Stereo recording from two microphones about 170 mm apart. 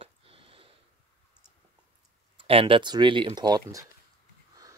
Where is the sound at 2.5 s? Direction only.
30° right (ahead or behind).